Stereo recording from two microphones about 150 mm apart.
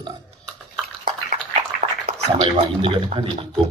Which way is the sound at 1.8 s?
70° right (ahead or behind).